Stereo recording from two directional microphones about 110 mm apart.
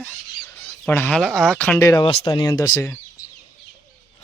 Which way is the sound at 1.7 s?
30° left (ahead or behind).